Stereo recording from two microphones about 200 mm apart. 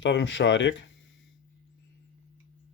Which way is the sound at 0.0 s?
65° left (ahead or behind).